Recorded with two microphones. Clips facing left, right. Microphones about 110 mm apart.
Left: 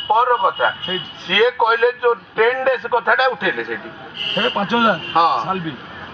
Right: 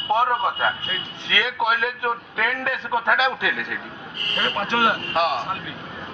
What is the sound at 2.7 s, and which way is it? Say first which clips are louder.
A man's voice: left 6 dB; 20° left (ahead or behind).